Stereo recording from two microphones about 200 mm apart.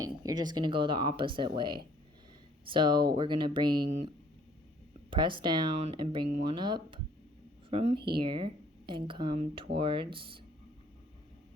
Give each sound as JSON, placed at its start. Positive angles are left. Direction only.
{"t": 0.0, "sound": "speech", "side_deg": -20}
{"t": 3.8, "sound": "speech", "side_deg": -35}
{"t": 5.1, "sound": "speech", "side_deg": -25}